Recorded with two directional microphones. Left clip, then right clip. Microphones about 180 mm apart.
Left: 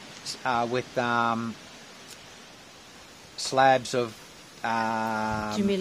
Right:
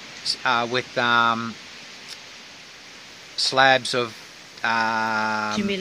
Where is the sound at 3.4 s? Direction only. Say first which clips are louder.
Right 4 dB; centre (ahead or behind).